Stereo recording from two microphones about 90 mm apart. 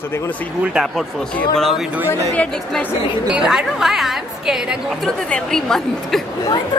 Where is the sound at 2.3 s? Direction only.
15° left (ahead or behind).